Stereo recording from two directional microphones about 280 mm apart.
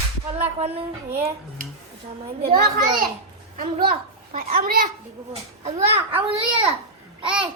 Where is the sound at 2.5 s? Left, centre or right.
Centre.